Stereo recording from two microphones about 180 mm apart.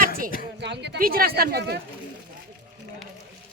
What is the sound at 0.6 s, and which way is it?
Speech, 70° right (ahead or behind).